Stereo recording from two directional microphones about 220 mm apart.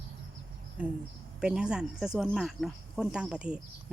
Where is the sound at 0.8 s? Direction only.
5° right (ahead or behind).